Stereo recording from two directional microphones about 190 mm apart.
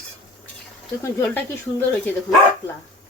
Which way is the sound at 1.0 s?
15° left (ahead or behind).